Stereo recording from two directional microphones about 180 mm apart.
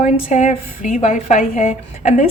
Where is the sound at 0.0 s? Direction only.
40° left (ahead or behind).